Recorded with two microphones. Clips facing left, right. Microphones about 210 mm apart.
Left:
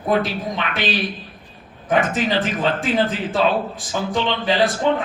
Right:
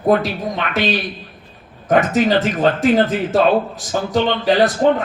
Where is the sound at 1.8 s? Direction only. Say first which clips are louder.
Right 5 dB; 45° right (ahead or behind).